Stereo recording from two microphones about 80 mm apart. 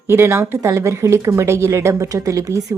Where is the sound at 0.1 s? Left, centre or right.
Right.